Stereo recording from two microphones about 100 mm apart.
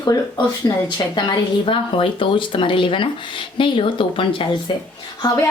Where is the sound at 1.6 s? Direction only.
60° left (ahead or behind).